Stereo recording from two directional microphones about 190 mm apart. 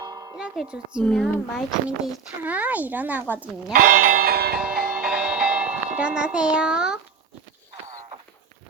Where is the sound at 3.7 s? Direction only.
45° right (ahead or behind).